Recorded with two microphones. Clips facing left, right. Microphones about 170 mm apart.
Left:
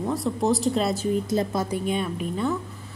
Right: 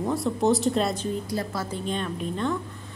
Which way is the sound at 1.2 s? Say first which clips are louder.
Left 5 dB; 20° left (ahead or behind).